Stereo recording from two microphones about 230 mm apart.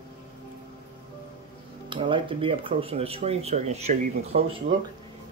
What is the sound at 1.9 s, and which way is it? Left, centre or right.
Speech, right.